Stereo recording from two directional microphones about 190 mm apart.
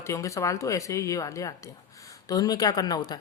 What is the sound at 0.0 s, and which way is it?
Speech, 15° left (ahead or behind).